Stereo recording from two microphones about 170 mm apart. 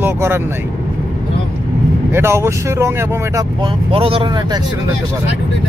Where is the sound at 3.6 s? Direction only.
30° right (ahead or behind).